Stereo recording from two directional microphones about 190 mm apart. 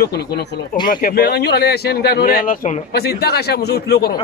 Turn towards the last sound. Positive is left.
turn(degrees=60)  # may be behind; listen again after turning